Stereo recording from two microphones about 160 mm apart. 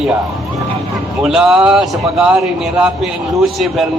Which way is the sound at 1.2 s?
5° right (ahead or behind).